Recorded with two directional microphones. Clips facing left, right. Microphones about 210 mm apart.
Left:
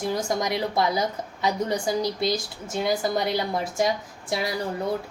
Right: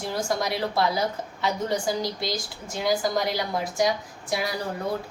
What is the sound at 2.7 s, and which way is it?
A woman's voice, 25° left (ahead or behind).